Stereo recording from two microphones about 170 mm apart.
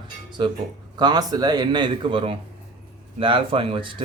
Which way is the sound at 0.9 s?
25° right (ahead or behind).